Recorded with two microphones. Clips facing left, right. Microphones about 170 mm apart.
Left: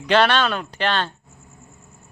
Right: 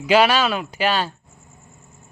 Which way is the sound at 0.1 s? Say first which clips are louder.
Right 1 dB; 5° right (ahead or behind).